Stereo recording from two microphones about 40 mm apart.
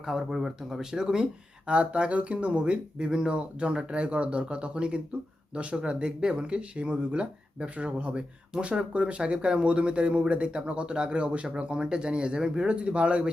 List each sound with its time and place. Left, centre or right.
0.0 s speech: centre; by 13.3 s right